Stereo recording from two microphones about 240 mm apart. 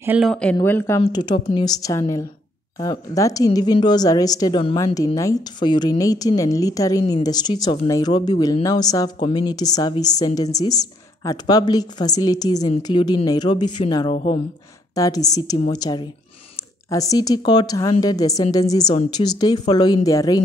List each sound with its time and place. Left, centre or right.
0.0 s a woman's voice: centre